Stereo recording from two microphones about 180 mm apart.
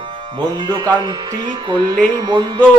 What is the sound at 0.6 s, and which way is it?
Speech, 25° right (ahead or behind).